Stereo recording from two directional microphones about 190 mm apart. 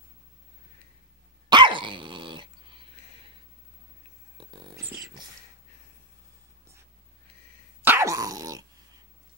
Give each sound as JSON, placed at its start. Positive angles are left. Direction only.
{"t": 1.5, "sound": "dog", "side_deg": -25}
{"t": 4.4, "sound": "a sound", "side_deg": -25}
{"t": 4.8, "sound": "dog", "side_deg": -5}
{"t": 7.8, "sound": "dog", "side_deg": -15}